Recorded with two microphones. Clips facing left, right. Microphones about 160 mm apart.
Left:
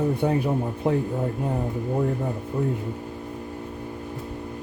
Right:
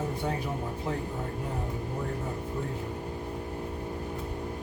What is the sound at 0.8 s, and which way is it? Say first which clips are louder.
Speech: left 11 dB; 60° left (ahead or behind).